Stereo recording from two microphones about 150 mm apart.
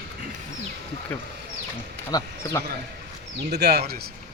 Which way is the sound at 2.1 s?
25° left (ahead or behind).